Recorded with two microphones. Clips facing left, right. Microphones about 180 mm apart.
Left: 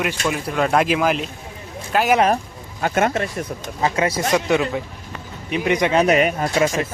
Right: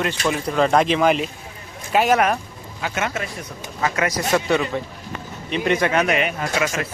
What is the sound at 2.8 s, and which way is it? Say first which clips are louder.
Speech: left 6 dB; 50° left (ahead or behind).